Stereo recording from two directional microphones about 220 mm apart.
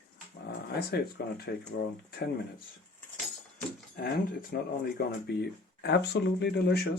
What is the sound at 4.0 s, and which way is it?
Speech, 45° left (ahead or behind).